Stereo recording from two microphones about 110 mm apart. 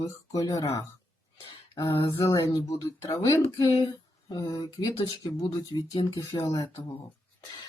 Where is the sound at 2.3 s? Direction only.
30° left (ahead or behind).